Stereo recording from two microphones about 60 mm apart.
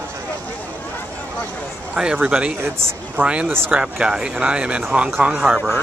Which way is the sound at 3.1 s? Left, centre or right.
Right.